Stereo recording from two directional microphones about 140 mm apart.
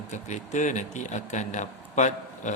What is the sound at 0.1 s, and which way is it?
Speech, 60° left (ahead or behind).